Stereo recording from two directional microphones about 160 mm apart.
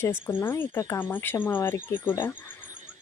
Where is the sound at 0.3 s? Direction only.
15° left (ahead or behind).